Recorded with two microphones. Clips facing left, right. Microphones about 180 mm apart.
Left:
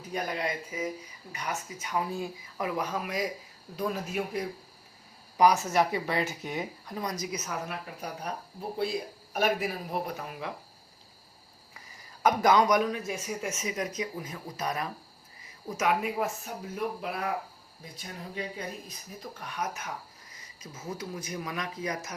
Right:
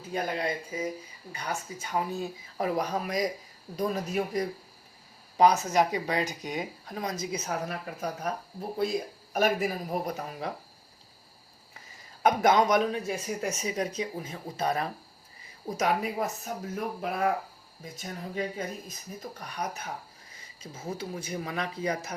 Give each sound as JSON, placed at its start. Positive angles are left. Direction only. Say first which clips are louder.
{"t": 0.1, "sound": "speech", "louder": "right 2 dB", "side_deg": -30}
{"t": 2.6, "sound": "speech", "louder": "right 3 dB", "side_deg": -35}
{"t": 5.4, "sound": "a man's voice", "louder": "right 1 dB", "side_deg": -20}
{"t": 12.2, "sound": "a man's voice", "louder": "even", "side_deg": -25}